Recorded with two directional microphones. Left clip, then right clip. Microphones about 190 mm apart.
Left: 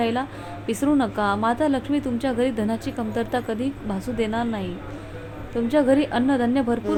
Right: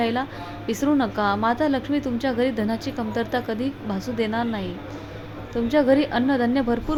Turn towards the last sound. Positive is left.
turn(degrees=0)  # may be behind; listen again after turning